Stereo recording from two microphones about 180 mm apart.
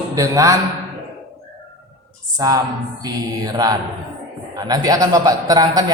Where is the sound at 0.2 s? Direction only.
20° right (ahead or behind).